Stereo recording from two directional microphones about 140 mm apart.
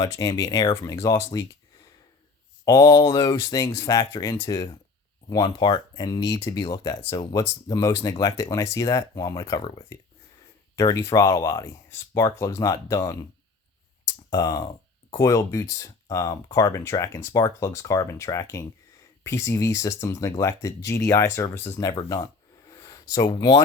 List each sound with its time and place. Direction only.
0.0 s speech: 25° left (ahead or behind)
2.6 s speech: 25° left (ahead or behind)
14.3 s speech: 25° left (ahead or behind)
22.7 s a sound: 25° left (ahead or behind)
23.3 s speech: 30° left (ahead or behind)